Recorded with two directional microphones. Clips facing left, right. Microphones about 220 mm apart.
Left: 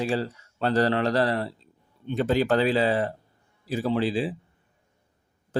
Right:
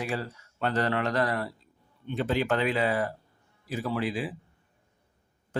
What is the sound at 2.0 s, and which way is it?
Speech, 40° left (ahead or behind).